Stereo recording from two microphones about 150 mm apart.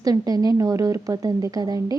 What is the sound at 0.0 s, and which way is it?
A woman's voice, 25° right (ahead or behind).